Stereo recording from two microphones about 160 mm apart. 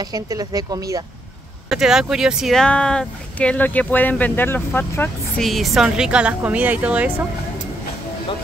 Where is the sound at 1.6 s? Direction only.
5° right (ahead or behind); by 5.4 s 15° left (ahead or behind).